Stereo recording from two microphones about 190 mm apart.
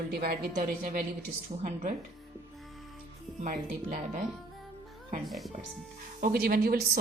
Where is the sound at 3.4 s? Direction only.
40° right (ahead or behind).